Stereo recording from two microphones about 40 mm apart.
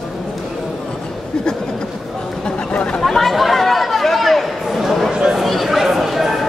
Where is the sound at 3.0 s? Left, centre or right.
Centre.